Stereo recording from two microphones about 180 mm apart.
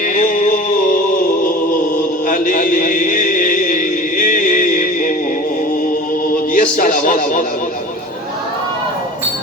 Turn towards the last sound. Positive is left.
turn(degrees=45)  # may be behind; listen again after turning